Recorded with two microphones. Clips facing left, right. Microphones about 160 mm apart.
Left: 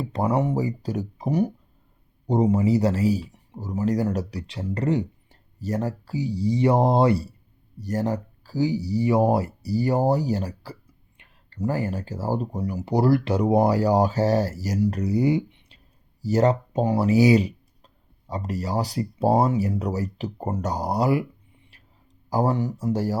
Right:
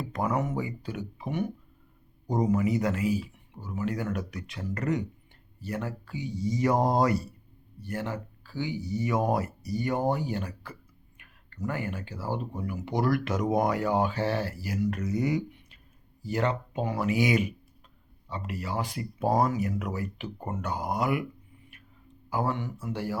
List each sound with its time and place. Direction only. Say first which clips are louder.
0.0 s speech: left 6 dB; 30° left (ahead or behind)
16.2 s speech: left 8 dB; 40° left (ahead or behind)